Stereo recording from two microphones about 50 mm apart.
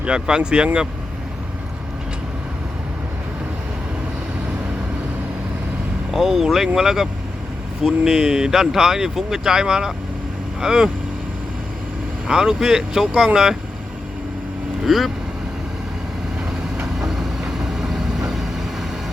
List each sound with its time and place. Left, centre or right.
0.0 s speech: centre
6.1 s speech: centre
12.3 s speech: centre
14.8 s speech: centre
16.8 s vehicle: centre